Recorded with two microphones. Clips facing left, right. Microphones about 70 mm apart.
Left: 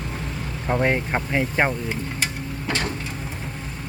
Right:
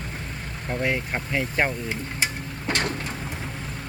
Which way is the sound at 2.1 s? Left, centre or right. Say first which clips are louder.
Left 1 dB; right.